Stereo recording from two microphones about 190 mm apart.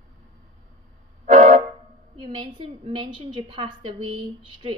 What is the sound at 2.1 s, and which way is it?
A woman's voice, 25° right (ahead or behind).